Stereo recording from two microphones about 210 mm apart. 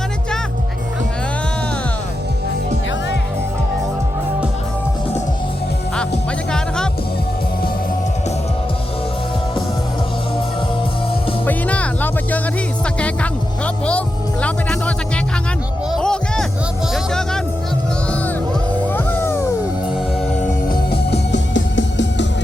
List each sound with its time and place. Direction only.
11.4 s music: 5° left (ahead or behind)
14.4 s music: 5° left (ahead or behind)
18.9 s music: 10° left (ahead or behind)
20.9 s music: 55° left (ahead or behind)